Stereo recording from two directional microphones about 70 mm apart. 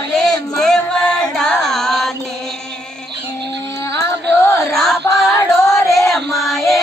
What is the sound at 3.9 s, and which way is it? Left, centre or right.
Music, left.